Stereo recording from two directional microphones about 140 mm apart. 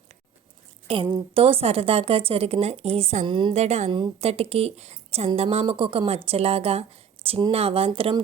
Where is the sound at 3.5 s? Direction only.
50° right (ahead or behind).